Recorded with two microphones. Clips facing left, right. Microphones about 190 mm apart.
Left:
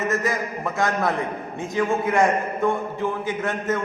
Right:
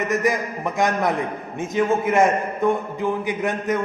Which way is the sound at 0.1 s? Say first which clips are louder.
Right 3 dB; 15° right (ahead or behind).